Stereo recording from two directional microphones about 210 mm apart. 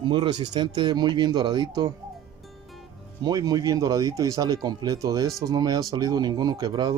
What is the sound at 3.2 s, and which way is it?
Speech, 20° right (ahead or behind).